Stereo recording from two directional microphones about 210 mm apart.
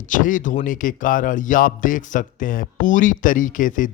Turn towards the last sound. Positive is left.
turn(degrees=40)  # may be behind; listen again after turning